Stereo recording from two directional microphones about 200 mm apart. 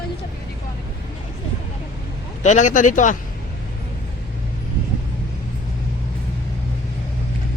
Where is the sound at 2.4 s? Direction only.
35° left (ahead or behind).